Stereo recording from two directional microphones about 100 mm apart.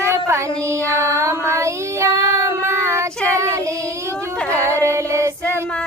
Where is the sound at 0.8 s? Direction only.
30° right (ahead or behind).